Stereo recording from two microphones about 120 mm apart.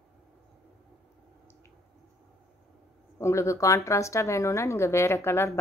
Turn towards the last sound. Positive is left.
turn(degrees=20)  # may be behind; listen again after turning